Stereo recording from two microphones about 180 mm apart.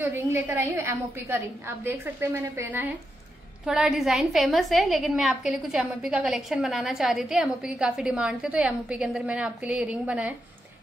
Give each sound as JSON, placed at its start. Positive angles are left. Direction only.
{"t": 0.0, "sound": "a woman's voice", "side_deg": -10}